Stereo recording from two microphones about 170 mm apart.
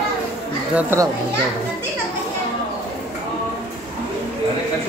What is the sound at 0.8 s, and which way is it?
Speech, 15° right (ahead or behind).